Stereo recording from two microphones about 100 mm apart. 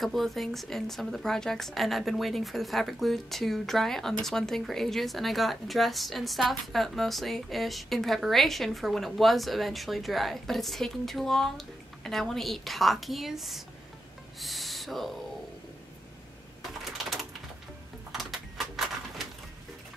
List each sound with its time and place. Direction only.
0.0 s speech: centre (ahead or behind)
14.4 s owl: centre (ahead or behind)
18.1 s a sound: centre (ahead or behind)